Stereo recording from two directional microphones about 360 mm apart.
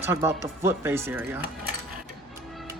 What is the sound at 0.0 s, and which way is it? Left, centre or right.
Speech, centre.